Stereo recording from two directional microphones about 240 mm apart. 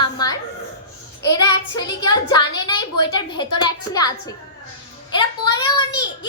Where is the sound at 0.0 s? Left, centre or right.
Centre.